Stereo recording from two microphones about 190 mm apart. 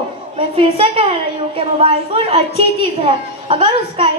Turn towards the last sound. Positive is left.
turn(degrees=-25)  # may be behind; listen again after turning